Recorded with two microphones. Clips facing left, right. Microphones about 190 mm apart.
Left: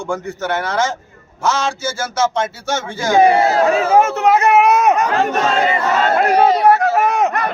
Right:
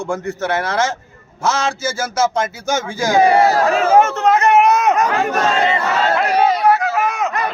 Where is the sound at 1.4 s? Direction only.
5° right (ahead or behind).